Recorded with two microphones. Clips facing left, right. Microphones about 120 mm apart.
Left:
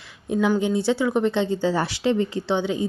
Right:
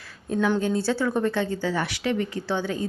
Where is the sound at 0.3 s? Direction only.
10° left (ahead or behind).